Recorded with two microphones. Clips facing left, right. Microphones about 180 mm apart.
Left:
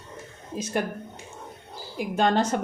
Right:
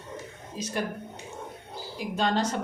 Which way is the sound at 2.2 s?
50° left (ahead or behind).